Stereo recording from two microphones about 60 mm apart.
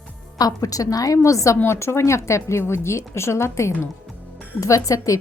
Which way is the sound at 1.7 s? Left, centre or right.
Left.